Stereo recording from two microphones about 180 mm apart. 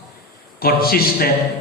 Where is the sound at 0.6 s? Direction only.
55° left (ahead or behind).